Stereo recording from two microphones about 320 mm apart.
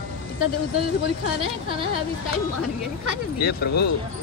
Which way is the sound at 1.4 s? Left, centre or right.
Centre.